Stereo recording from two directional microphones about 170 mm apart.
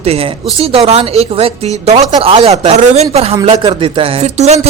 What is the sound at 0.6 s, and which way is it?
Speech, 35° right (ahead or behind).